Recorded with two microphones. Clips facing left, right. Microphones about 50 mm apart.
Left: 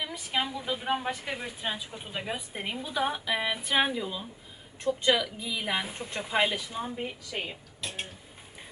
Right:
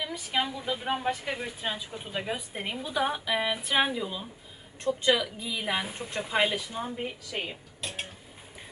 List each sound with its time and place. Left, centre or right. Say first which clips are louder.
0.0 s a woman's voice: right 1 dB; centre
7.3 s dishes: right 1 dB; centre